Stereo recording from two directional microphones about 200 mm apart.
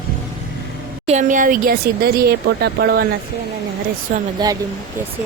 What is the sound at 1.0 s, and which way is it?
Speech, 35° right (ahead or behind).